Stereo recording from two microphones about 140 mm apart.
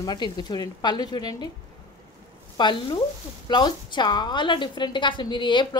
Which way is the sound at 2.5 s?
35° left (ahead or behind).